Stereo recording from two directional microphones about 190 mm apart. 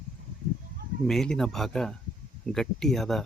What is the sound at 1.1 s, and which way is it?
Speech, centre (ahead or behind).